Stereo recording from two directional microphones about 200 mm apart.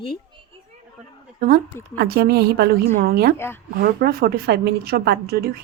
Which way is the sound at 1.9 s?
50° right (ahead or behind).